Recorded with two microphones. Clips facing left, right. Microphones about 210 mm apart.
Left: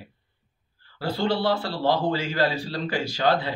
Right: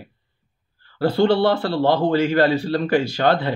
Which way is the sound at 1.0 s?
60° right (ahead or behind).